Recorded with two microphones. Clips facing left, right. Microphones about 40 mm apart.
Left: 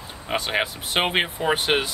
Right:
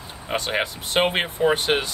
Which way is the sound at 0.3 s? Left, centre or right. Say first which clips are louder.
Even; centre.